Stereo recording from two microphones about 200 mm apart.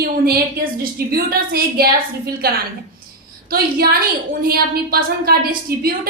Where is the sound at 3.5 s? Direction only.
50° right (ahead or behind).